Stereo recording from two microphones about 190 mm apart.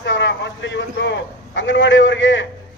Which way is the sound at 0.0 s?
75° left (ahead or behind).